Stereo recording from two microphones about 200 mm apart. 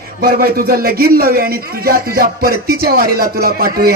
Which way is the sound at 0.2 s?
45° right (ahead or behind).